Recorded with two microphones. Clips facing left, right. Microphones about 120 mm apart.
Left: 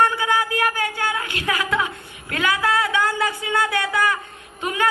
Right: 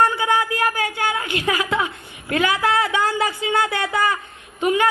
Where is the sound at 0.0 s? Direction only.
20° right (ahead or behind).